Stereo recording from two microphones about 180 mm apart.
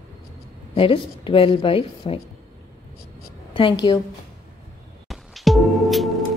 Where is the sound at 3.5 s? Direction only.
30° left (ahead or behind).